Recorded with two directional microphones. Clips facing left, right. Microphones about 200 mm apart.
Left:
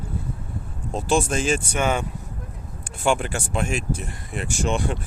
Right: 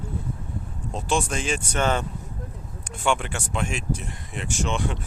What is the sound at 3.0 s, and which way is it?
Speech, 40° left (ahead or behind).